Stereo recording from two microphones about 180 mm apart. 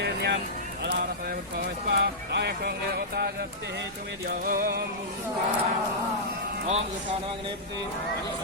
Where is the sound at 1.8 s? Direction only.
70° right (ahead or behind).